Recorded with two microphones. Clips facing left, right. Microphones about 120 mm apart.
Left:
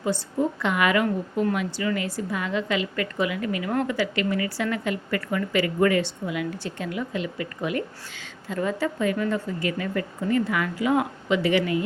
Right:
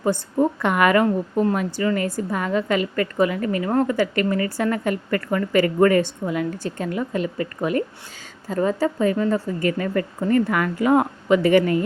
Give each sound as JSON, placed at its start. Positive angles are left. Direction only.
{"t": 0.0, "sound": "a woman's voice", "side_deg": -50}
{"t": 1.0, "sound": "a woman's voice", "side_deg": -35}